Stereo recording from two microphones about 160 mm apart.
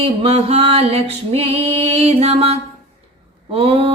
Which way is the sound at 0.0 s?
35° right (ahead or behind).